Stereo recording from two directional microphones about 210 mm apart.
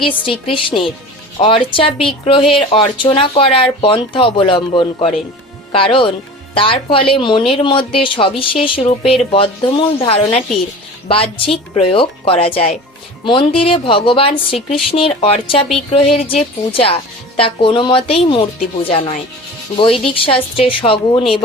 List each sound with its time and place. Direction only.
0.1 s speech: 25° left (ahead or behind)